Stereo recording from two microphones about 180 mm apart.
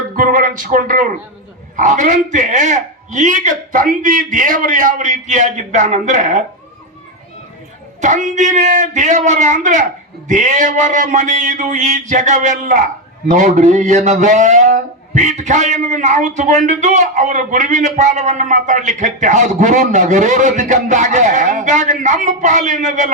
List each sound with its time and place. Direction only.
0.2 s a man's voice: 50° right (ahead or behind)
8.0 s a man's voice: 45° right (ahead or behind)